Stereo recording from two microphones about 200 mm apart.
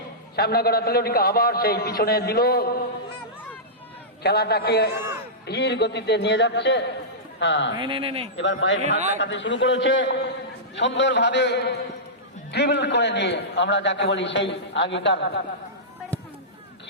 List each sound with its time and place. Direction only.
0.3 s a man's voice: 50° left (ahead or behind)
4.2 s a man's voice: 55° left (ahead or behind)
7.8 s speech: 25° right (ahead or behind)
8.4 s a man's voice: 65° left (ahead or behind)